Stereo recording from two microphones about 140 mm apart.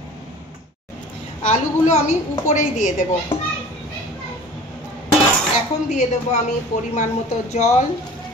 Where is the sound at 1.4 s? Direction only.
55° left (ahead or behind).